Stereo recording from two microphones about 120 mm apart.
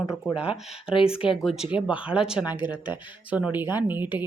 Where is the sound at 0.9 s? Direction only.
50° left (ahead or behind).